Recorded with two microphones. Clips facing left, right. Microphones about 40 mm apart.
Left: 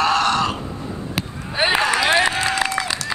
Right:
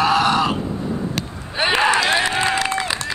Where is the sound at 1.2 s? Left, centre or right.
Centre.